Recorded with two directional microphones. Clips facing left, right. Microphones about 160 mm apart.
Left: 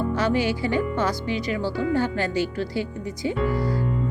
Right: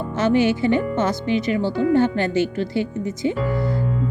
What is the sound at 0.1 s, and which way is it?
A woman's voice, 25° right (ahead or behind).